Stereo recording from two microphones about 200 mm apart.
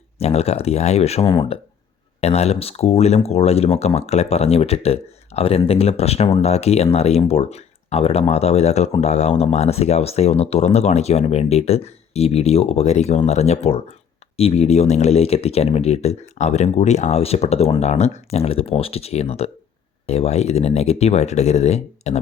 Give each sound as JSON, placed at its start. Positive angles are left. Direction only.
{"t": 0.2, "sound": "speech", "side_deg": 30}
{"t": 1.3, "sound": "speech", "side_deg": 20}
{"t": 2.2, "sound": "speech", "side_deg": 30}